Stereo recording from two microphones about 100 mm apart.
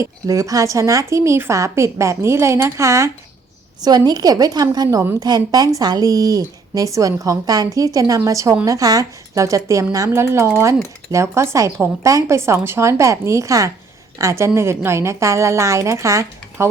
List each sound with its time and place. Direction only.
0.0 s a woman's voice: 35° right (ahead or behind)
3.8 s a woman's voice: 45° right (ahead or behind)